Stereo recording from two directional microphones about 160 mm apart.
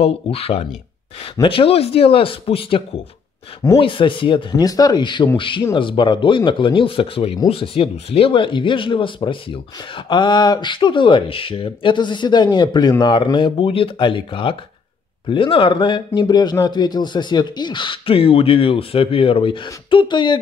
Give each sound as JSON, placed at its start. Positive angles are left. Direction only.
{"t": 0.0, "sound": "speech", "side_deg": 40}
{"t": 3.8, "sound": "speech", "side_deg": 30}